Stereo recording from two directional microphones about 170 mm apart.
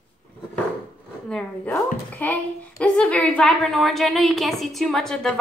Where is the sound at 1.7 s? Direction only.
10° left (ahead or behind).